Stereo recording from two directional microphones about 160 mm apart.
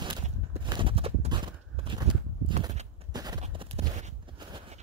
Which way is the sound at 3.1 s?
25° right (ahead or behind).